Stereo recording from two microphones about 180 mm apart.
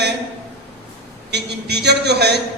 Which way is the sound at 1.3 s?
65° right (ahead or behind).